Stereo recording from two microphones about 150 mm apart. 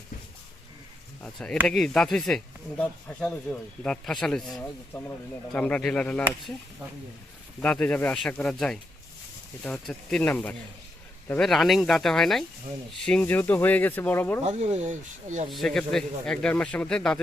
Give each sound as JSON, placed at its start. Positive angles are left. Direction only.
{"t": 1.2, "sound": "speech", "side_deg": 5}
{"t": 7.6, "sound": "speech", "side_deg": 10}
{"t": 14.4, "sound": "speech", "side_deg": -45}
{"t": 15.4, "sound": "speech", "side_deg": 0}